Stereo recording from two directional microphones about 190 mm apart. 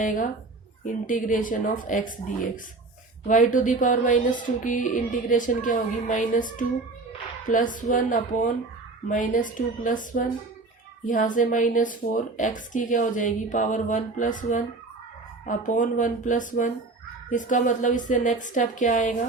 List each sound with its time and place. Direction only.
0.0 s speech: 45° left (ahead or behind)
3.2 s a woman's voice: 45° left (ahead or behind)